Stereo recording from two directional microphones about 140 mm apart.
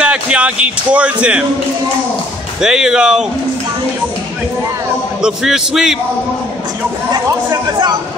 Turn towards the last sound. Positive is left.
turn(degrees=-25)  # may be behind; listen again after turning